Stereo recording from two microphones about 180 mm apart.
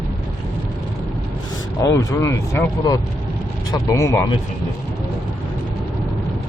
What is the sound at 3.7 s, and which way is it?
Speech, 15° left (ahead or behind).